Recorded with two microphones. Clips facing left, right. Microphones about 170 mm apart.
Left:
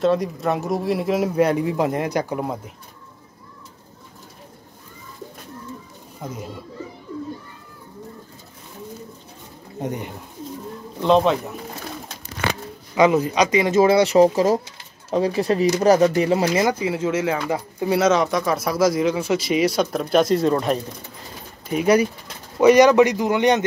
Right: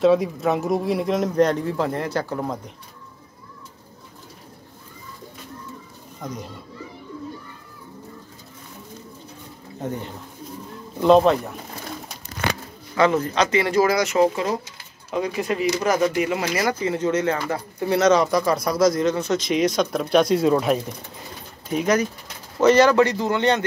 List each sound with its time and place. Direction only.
0.0 s speech: centre (ahead or behind)
6.2 s speech: 5° left (ahead or behind)
9.8 s speech: 15° left (ahead or behind)
11.0 s speech: 5° right (ahead or behind)
12.9 s speech: 15° left (ahead or behind)
16.8 s speech: 5° left (ahead or behind)
21.6 s speech: 10° left (ahead or behind)